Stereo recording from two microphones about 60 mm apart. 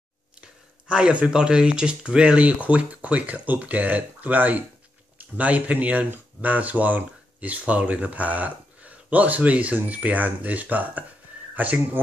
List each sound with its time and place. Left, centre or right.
0.8 s speech: centre